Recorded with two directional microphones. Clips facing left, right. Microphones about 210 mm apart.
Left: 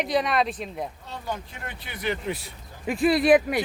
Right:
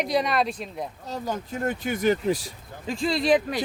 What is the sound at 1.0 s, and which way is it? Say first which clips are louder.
Speech: right 3 dB; 40° right (ahead or behind).